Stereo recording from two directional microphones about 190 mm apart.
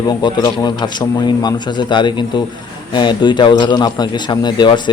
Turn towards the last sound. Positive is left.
turn(degrees=25)  # may be behind; listen again after turning